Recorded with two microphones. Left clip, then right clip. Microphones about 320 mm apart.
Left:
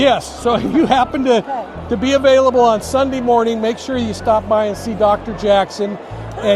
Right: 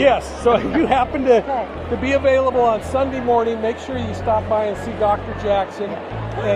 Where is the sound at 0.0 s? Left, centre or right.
Left.